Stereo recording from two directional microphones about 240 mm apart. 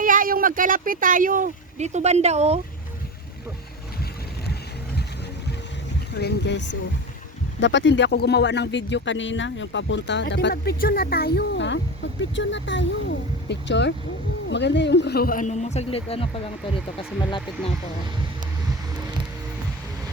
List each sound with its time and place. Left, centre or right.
0.0 s speech: right
6.1 s speech: left